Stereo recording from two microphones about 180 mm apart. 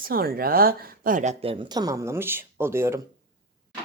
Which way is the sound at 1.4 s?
30° right (ahead or behind).